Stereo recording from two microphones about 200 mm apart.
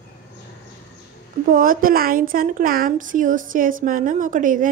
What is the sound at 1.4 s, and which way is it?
A woman's voice, 45° right (ahead or behind).